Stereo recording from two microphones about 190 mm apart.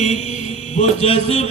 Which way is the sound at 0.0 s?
35° left (ahead or behind).